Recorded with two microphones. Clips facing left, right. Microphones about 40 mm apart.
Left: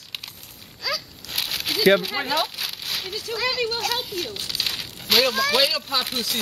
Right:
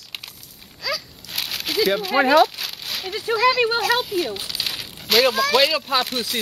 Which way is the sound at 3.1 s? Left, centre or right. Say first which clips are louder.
Right 7 dB; right.